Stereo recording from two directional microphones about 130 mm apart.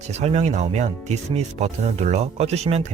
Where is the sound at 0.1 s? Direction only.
60° right (ahead or behind).